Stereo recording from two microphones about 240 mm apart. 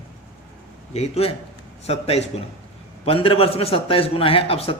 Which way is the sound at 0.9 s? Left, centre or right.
Left.